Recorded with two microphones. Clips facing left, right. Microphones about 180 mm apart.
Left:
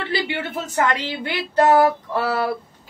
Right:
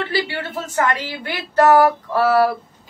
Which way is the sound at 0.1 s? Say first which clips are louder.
Right 1 dB; 20° left (ahead or behind).